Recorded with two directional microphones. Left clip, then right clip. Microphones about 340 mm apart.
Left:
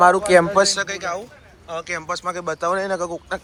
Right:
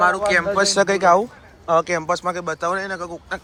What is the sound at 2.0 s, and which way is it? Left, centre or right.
Speech, centre.